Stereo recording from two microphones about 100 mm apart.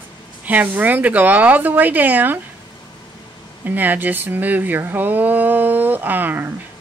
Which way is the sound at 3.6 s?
15° right (ahead or behind).